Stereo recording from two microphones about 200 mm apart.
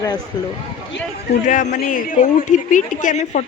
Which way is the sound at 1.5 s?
40° left (ahead or behind).